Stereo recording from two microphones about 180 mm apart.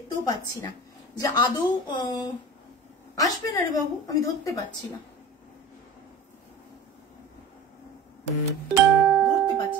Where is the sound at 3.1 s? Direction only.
20° left (ahead or behind).